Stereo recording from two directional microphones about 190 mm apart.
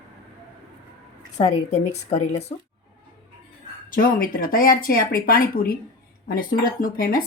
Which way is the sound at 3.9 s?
50° left (ahead or behind).